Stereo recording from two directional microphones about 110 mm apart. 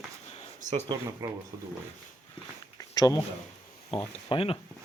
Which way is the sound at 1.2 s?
35° right (ahead or behind).